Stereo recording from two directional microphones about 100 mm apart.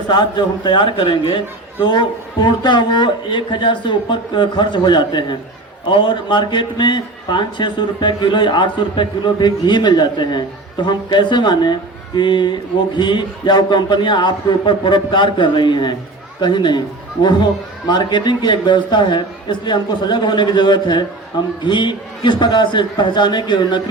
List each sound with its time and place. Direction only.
0.1 s a man's voice: 50° left (ahead or behind)
17.8 s a man's voice: 50° left (ahead or behind)